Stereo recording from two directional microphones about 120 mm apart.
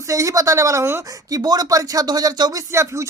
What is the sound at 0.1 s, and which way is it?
Speech, 25° right (ahead or behind).